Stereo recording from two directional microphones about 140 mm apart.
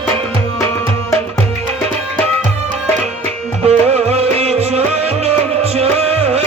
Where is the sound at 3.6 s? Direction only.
50° right (ahead or behind).